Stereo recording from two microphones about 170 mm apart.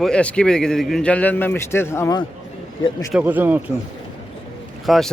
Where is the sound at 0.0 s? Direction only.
5° left (ahead or behind).